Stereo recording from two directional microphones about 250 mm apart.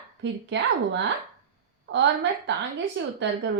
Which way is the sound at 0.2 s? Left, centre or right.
Right.